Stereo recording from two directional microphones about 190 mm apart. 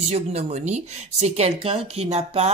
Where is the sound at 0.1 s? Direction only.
35° right (ahead or behind).